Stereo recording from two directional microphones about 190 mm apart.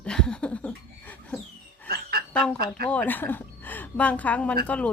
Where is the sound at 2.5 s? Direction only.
55° right (ahead or behind).